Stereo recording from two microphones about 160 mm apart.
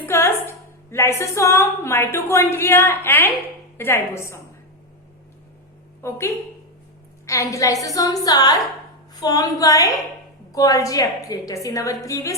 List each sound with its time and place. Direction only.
0.0 s a woman's voice: 15° left (ahead or behind)
6.0 s a woman's voice: 15° left (ahead or behind)